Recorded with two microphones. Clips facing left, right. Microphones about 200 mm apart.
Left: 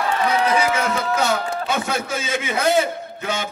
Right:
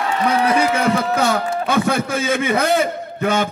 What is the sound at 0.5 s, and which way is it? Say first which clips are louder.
A man's voice: right 3 dB; 55° right (ahead or behind).